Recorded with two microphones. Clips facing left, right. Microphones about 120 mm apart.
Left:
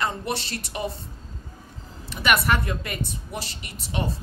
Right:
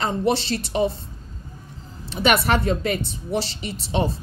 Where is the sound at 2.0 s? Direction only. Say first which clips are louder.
Right 3 dB; 25° right (ahead or behind).